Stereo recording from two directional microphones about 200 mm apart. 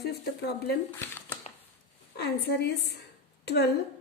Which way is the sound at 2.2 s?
55° left (ahead or behind).